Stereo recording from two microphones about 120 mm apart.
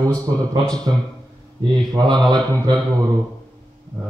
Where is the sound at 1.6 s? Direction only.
35° right (ahead or behind).